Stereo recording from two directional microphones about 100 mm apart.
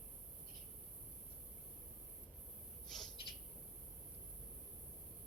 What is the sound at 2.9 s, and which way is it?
Owl, 5° left (ahead or behind).